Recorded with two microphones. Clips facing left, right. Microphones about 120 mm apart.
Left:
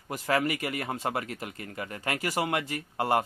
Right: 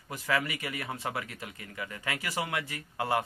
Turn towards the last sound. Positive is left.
turn(degrees=35)  # may be behind; listen again after turning